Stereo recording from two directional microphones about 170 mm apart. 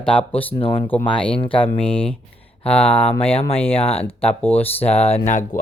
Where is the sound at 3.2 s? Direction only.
35° left (ahead or behind).